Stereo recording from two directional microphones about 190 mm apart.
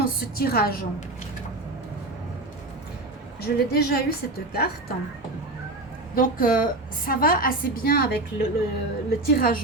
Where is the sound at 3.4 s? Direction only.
55° left (ahead or behind).